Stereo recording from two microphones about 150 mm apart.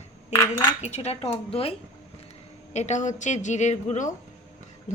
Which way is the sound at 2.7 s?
50° left (ahead or behind).